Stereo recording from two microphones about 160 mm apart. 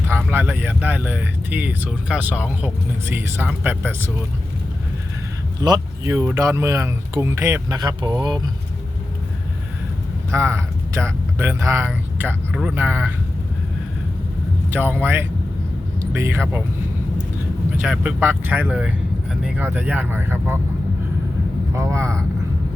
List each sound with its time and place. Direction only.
0.1 s speech: 10° right (ahead or behind)
5.5 s speech: 25° right (ahead or behind)
10.3 s speech: 15° right (ahead or behind)
14.7 s speech: 10° right (ahead or behind)
17.8 s speech: 5° right (ahead or behind)
21.8 s speech: 20° right (ahead or behind)